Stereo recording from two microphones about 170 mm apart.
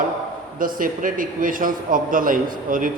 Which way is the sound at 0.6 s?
55° right (ahead or behind).